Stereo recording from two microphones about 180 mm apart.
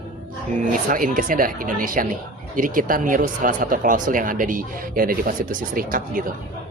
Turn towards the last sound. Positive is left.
turn(degrees=-50)  # may be behind; listen again after turning